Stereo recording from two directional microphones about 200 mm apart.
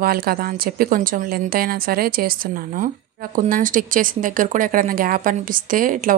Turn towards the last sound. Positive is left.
turn(degrees=-45)  # may be behind; listen again after turning